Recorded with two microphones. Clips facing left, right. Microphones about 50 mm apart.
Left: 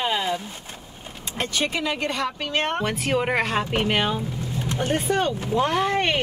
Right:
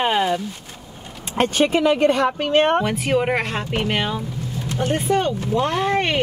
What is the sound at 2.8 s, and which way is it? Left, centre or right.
Speech, centre.